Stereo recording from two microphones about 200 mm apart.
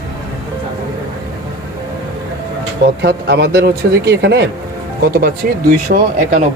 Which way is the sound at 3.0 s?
55° right (ahead or behind).